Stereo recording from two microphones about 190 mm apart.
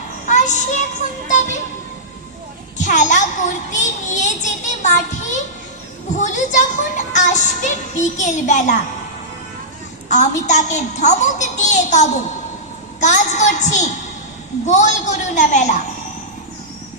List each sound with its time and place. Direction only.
0.3 s child singing: 40° left (ahead or behind)
1.3 s music: 40° left (ahead or behind)
2.7 s a child's voice: 40° left (ahead or behind)
10.1 s speech: 40° left (ahead or behind)